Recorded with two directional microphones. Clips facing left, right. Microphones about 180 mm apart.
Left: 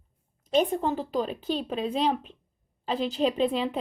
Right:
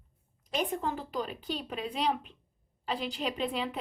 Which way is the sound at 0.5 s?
25° left (ahead or behind).